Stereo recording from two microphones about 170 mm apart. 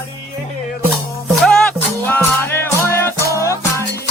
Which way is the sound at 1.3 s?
Centre (ahead or behind).